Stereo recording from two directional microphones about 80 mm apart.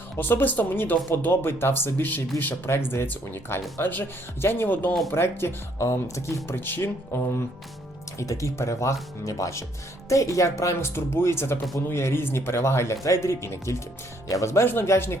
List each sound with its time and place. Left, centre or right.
0.2 s speech: left
8.2 s speech: left